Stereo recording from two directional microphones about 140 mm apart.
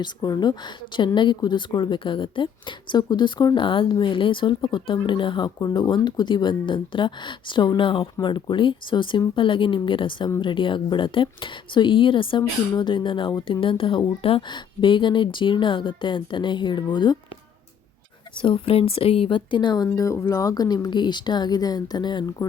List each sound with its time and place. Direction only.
0.0 s speech: 30° left (ahead or behind)
18.3 s speech: 40° left (ahead or behind)